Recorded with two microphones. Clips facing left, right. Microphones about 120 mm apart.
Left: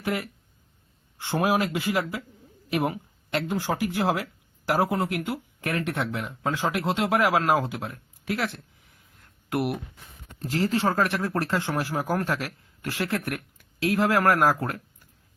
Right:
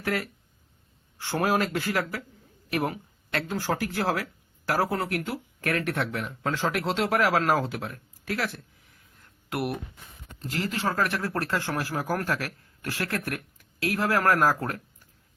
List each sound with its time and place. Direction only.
0.0 s speech: 20° left (ahead or behind)
1.4 s speech: 10° left (ahead or behind)
9.5 s speech: 25° left (ahead or behind)